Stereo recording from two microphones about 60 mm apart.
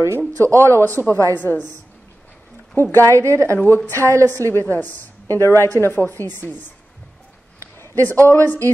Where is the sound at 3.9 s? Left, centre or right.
Right.